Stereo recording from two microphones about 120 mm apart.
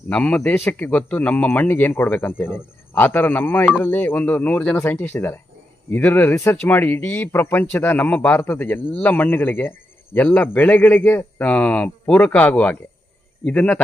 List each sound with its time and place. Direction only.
0.1 s speech: 10° left (ahead or behind)